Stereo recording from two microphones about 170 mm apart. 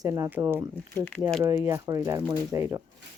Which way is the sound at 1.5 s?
15° right (ahead or behind).